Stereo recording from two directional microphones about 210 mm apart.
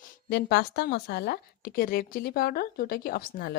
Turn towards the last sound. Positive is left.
turn(degrees=45)  # may be behind; listen again after turning